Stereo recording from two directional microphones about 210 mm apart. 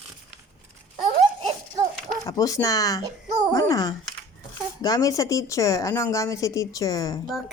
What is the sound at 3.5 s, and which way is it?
Speech, 15° left (ahead or behind).